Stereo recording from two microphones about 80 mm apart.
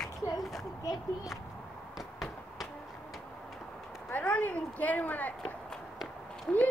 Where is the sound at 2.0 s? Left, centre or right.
Centre.